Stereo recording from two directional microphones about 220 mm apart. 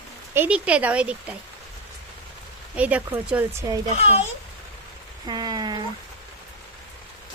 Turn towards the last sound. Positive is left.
turn(degrees=-20)  # may be behind; listen again after turning